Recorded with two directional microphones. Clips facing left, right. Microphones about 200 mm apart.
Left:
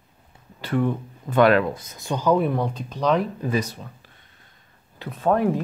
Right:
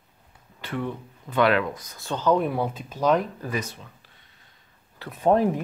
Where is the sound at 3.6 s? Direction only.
35° left (ahead or behind).